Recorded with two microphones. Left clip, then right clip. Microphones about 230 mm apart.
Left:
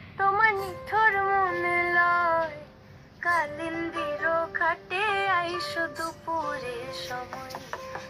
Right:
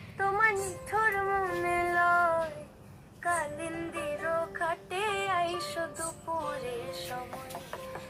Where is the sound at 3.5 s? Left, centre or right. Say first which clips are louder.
Left 5 dB; left.